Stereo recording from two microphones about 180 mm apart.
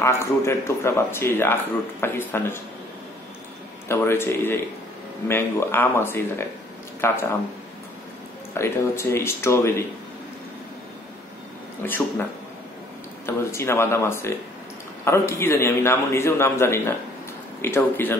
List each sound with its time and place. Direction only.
0.0 s speech: 15° left (ahead or behind)
3.9 s speech: 15° left (ahead or behind)
8.5 s speech: 15° left (ahead or behind)
11.8 s speech: 10° left (ahead or behind)